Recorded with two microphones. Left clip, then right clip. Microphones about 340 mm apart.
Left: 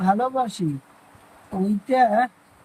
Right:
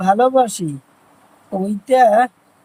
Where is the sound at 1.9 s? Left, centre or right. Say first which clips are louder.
Right 7 dB; right.